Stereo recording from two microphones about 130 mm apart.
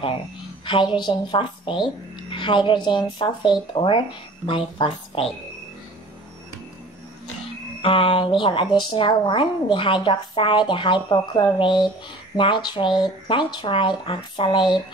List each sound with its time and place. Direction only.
0.7 s a woman's voice: 40° left (ahead or behind)
7.8 s a woman's voice: 40° left (ahead or behind)